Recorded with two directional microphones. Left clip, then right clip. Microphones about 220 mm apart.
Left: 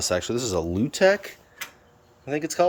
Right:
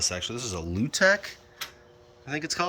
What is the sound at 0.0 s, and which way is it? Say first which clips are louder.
Speech: left 5 dB; 30° left (ahead or behind).